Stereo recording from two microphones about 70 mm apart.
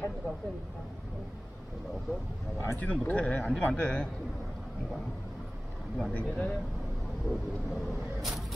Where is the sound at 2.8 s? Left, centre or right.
Left.